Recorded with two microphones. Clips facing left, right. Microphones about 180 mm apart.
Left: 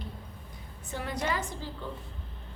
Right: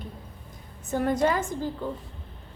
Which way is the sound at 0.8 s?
45° right (ahead or behind).